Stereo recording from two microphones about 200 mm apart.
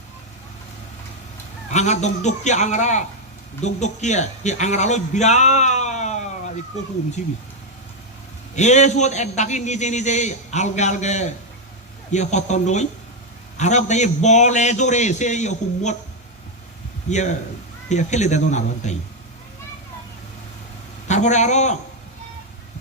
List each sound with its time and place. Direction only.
1.7 s a man's voice: 35° left (ahead or behind)
8.5 s a man's voice: 35° left (ahead or behind)
17.1 s a man's voice: 35° left (ahead or behind)
21.1 s a man's voice: 35° left (ahead or behind)